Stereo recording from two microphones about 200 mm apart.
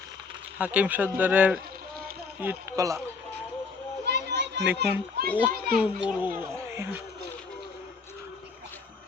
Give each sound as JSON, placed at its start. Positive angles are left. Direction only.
{"t": 0.6, "sound": "a child's voice", "side_deg": -5}
{"t": 4.0, "sound": "children playing", "side_deg": -55}
{"t": 4.8, "sound": "a child's voice", "side_deg": -50}
{"t": 5.8, "sound": "a child's voice", "side_deg": -10}